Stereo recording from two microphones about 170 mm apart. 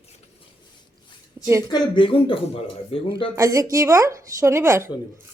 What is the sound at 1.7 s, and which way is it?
Speech, 30° left (ahead or behind).